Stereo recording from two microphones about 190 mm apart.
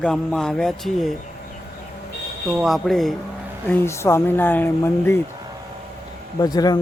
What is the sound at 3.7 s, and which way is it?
Speech, 10° left (ahead or behind).